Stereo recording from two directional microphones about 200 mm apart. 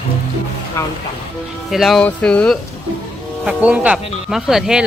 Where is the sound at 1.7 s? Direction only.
Centre (ahead or behind).